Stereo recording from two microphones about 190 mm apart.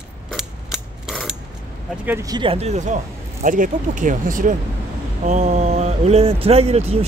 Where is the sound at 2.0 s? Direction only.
15° right (ahead or behind); by 7.0 s 35° right (ahead or behind).